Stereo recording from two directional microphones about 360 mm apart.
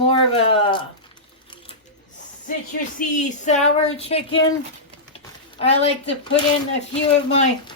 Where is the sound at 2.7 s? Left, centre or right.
Left.